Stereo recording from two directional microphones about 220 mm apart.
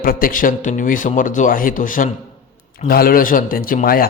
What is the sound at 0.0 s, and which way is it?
A man's voice, 40° left (ahead or behind).